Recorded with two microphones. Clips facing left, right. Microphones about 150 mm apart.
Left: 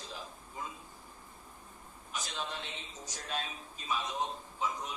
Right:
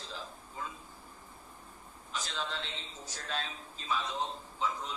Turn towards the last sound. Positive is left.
turn(degrees=15)  # may be behind; listen again after turning